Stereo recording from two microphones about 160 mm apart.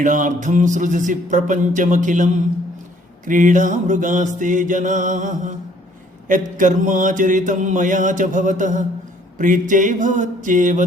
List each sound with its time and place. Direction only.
0.0 s mantra: 55° right (ahead or behind)